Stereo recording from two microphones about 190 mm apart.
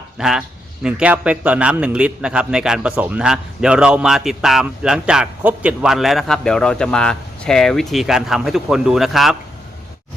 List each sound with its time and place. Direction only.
0.2 s a man's voice: 5° right (ahead or behind)